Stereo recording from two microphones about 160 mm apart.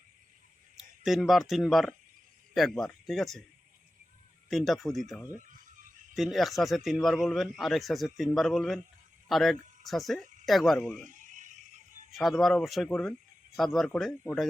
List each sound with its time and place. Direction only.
0.8 s a man's voice: centre (ahead or behind)
4.4 s a man's voice: centre (ahead or behind)
11.0 s a sound: 50° right (ahead or behind)
12.1 s a man's voice: centre (ahead or behind)